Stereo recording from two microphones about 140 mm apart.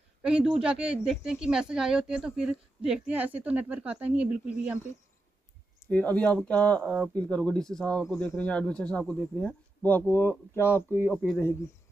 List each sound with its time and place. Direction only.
0.2 s speech: 5° right (ahead or behind)
5.9 s speech: 10° left (ahead or behind)